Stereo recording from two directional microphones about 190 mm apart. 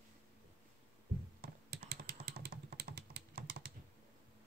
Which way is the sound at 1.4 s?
55° right (ahead or behind).